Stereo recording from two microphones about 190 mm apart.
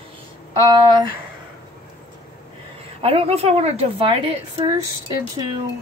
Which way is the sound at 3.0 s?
30° right (ahead or behind).